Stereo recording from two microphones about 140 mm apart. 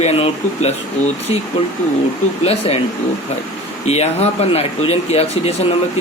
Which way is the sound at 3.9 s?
50° left (ahead or behind).